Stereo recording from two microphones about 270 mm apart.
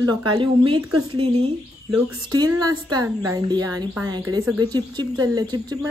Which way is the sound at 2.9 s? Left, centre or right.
Right.